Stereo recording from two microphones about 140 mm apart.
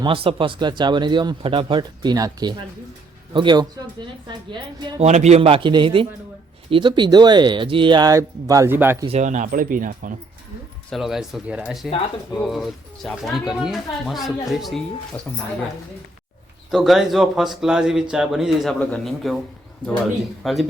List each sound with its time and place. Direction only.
0.0 s speech: 40° right (ahead or behind)
4.9 s speech: 55° right (ahead or behind); by 9.0 s 15° right (ahead or behind)
9.0 s speech: 55° right (ahead or behind); by 10.2 s 75° right (ahead or behind)
10.9 s speech: centre (ahead or behind)
16.7 s speech: centre (ahead or behind)
20.4 s speech: centre (ahead or behind)